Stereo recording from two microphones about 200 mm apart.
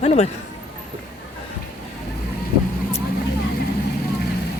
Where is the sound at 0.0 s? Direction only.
35° left (ahead or behind).